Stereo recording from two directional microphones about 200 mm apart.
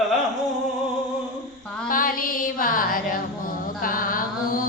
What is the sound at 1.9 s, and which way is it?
Female singing, 45° left (ahead or behind).